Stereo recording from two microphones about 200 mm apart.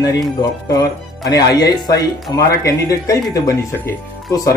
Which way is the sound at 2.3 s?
15° left (ahead or behind).